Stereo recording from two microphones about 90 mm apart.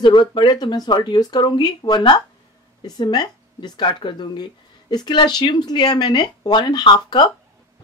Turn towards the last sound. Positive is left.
turn(degrees=55)  # may be behind; listen again after turning